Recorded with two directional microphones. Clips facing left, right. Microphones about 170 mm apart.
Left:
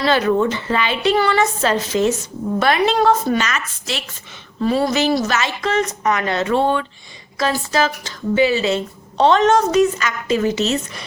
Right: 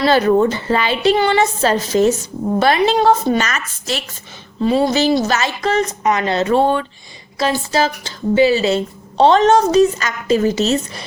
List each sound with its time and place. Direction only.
0.0 s speech: 35° right (ahead or behind)
1.1 s speech: 25° right (ahead or behind); by 4.0 s 40° right (ahead or behind)
4.6 s speech: 20° right (ahead or behind); by 6.8 s 40° right (ahead or behind)
7.3 s speech: 30° right (ahead or behind)